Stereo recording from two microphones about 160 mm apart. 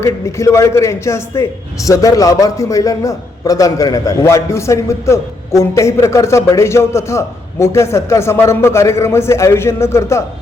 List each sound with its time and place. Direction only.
0.0 s a man's voice: 20° left (ahead or behind)